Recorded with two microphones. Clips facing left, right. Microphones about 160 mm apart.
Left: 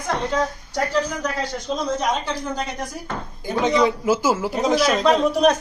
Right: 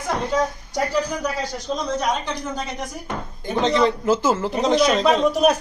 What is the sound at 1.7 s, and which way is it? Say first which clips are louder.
A man's voice: even; 5° left (ahead or behind).